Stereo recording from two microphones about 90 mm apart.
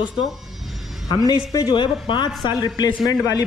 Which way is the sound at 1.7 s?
60° left (ahead or behind).